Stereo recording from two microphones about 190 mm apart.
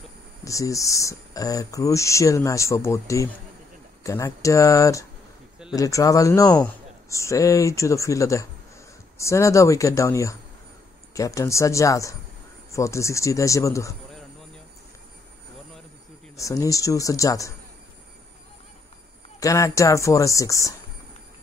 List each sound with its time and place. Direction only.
0.5 s speech: 15° left (ahead or behind)
16.3 s speech: 15° left (ahead or behind)
19.4 s speech: 15° left (ahead or behind)